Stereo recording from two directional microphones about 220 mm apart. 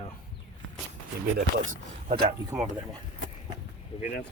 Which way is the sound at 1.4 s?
65° right (ahead or behind).